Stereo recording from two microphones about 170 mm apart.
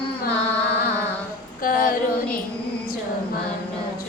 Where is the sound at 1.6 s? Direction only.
55° left (ahead or behind).